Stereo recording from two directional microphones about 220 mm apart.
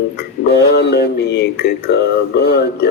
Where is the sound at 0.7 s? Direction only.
50° left (ahead or behind).